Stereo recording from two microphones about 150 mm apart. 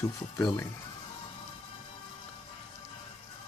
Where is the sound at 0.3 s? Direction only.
10° left (ahead or behind).